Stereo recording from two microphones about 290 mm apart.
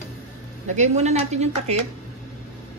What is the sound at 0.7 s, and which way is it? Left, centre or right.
A woman's voice, right.